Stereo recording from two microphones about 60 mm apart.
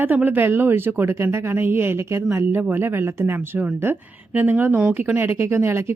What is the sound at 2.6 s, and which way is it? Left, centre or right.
Speech, right.